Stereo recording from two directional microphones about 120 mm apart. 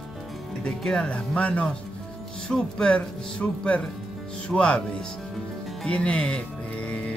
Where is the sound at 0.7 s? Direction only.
5° left (ahead or behind).